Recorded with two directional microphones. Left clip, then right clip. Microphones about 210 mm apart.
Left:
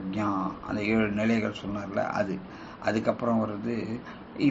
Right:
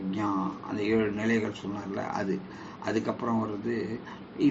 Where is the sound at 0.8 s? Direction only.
25° left (ahead or behind).